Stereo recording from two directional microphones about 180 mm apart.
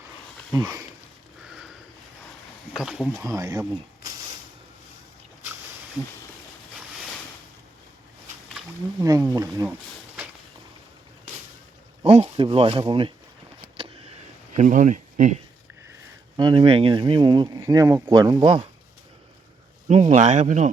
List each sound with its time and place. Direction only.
0.5 s speech: 20° right (ahead or behind)
1.5 s sniff: centre (ahead or behind)
2.7 s speech: 5° right (ahead or behind)
3.2 s speech: 20° right (ahead or behind)
9.0 s speech: 20° right (ahead or behind)
12.0 s speech: 35° right (ahead or behind)
13.7 s a sound: 30° right (ahead or behind)
14.5 s speech: 40° right (ahead or behind)
16.4 s speech: 25° right (ahead or behind)
19.9 s speech: 40° right (ahead or behind)